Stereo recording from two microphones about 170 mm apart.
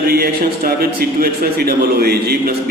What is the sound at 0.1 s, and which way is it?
A man's voice, 65° right (ahead or behind).